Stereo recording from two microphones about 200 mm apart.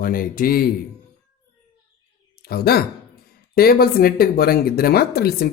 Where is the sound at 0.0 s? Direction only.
45° left (ahead or behind).